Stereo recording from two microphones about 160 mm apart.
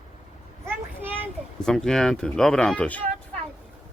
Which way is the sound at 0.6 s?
15° right (ahead or behind).